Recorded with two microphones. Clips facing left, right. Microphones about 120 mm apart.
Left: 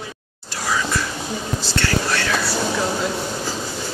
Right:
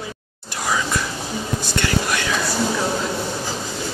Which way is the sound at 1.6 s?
15° right (ahead or behind).